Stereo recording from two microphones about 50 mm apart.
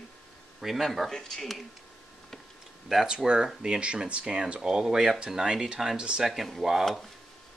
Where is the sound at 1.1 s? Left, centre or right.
Centre.